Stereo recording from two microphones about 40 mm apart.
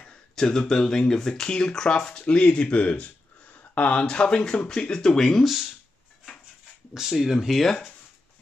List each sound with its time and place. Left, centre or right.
0.4 s speech: centre; by 4.0 s left
4.0 s speech: left
4.9 s speech: centre
5.4 s speech: centre
6.9 s speech: centre
7.4 s speech: centre